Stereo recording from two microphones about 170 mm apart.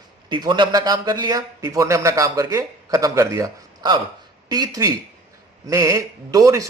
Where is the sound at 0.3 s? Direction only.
25° right (ahead or behind).